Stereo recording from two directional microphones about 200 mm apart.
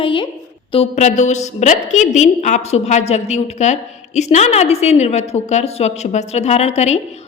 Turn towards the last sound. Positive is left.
turn(degrees=35)  # may be behind; listen again after turning